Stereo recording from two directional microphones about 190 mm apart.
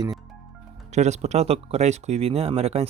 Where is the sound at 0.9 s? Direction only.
35° right (ahead or behind).